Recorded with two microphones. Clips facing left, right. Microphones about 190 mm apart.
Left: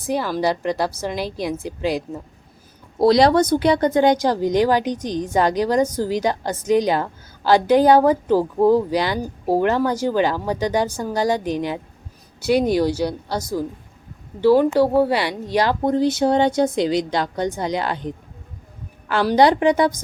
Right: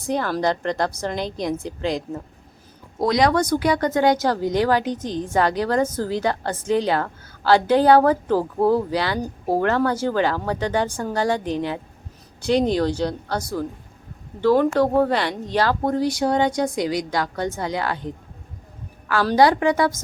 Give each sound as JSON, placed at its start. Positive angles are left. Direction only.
{"t": 0.1, "sound": "a woman's voice", "side_deg": 5}
{"t": 3.0, "sound": "a woman's voice", "side_deg": 30}